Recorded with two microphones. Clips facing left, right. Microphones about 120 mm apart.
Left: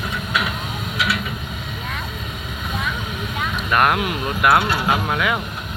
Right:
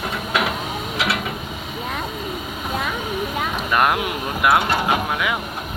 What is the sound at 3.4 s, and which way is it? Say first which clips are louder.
Vehicle: right 1 dB; 40° right (ahead or behind).